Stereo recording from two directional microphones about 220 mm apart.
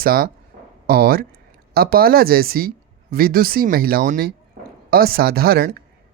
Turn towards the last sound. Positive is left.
turn(degrees=-45)  # may be behind; listen again after turning